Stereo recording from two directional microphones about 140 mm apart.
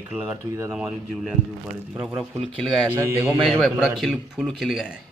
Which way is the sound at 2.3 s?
10° left (ahead or behind).